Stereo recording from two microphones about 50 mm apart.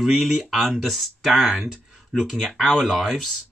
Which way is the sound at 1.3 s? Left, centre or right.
Centre.